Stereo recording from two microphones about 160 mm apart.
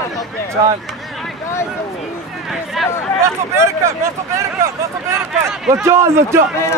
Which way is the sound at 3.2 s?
15° right (ahead or behind).